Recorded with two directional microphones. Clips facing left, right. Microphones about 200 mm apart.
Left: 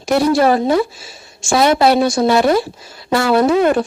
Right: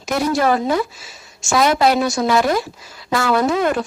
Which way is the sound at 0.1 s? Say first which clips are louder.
Left 5 dB; 30° left (ahead or behind).